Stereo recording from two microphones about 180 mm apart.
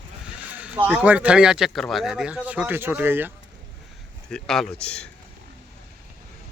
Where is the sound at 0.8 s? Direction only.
10° right (ahead or behind).